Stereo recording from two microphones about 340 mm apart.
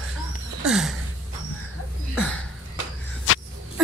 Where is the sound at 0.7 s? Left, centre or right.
Centre.